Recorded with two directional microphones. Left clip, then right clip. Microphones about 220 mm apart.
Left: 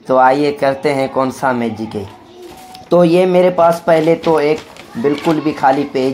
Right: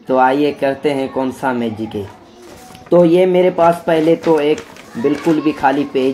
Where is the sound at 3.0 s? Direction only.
5° right (ahead or behind).